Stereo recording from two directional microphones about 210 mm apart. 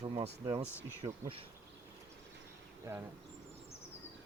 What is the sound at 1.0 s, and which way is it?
Speech, 25° right (ahead or behind).